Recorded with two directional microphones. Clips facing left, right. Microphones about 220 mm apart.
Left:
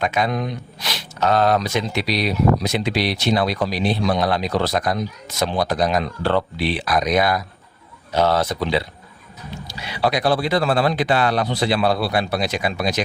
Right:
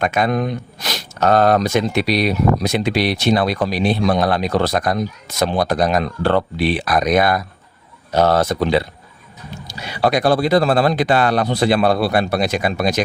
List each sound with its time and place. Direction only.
0.0 s speech: 50° right (ahead or behind)